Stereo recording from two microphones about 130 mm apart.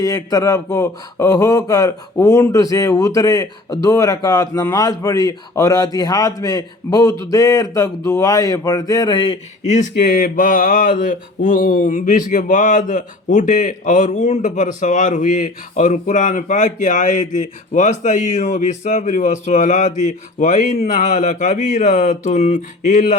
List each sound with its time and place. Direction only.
0.0 s a man's voice: 25° left (ahead or behind)
9.6 s speech: 80° left